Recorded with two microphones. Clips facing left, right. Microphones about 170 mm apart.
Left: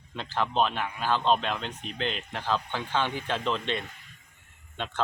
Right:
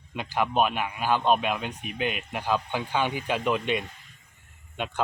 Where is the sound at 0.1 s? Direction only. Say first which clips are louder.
Right 3 dB; 15° right (ahead or behind).